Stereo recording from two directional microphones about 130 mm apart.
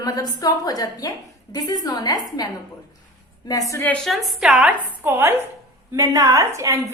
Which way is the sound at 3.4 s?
25° left (ahead or behind).